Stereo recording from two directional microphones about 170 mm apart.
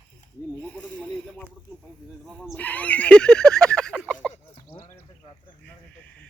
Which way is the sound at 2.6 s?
10° left (ahead or behind).